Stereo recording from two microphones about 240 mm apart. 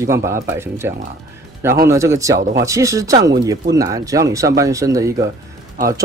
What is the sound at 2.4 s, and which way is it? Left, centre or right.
Speech, right.